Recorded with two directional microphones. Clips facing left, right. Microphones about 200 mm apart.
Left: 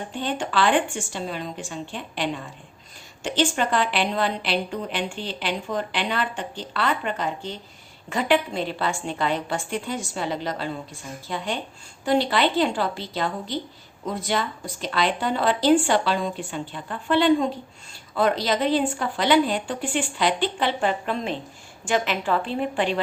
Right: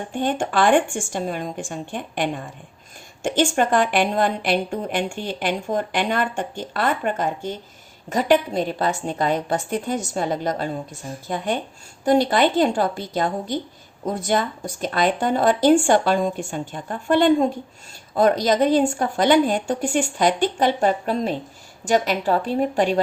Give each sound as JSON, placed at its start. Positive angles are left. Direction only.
{"t": 0.1, "sound": "a woman's voice", "side_deg": -50}